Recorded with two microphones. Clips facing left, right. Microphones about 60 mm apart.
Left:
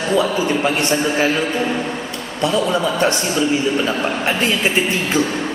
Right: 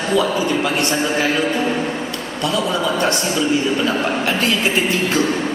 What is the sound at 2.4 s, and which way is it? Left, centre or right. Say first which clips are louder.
A man's voice: left 2 dB; left.